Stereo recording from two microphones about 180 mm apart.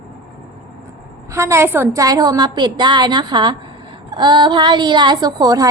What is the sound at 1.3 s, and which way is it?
A woman's voice, 15° right (ahead or behind).